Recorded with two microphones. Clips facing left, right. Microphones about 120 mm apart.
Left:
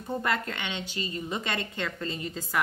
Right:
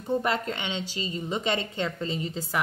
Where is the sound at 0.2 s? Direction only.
20° right (ahead or behind).